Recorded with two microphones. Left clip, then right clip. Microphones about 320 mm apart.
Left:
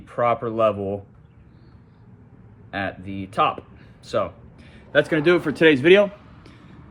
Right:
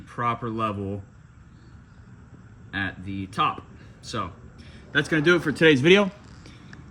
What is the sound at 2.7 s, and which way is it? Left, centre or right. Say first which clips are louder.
A man's voice: left 2 dB; centre.